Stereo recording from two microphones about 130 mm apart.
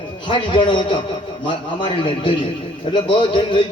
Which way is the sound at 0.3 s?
40° left (ahead or behind).